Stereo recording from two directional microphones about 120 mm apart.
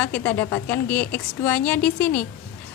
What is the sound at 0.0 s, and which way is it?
A woman's voice, 15° left (ahead or behind).